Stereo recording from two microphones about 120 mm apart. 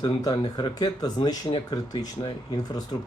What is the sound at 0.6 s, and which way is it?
Speech, 35° left (ahead or behind).